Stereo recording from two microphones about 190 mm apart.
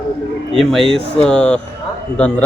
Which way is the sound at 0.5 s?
Centre (ahead or behind).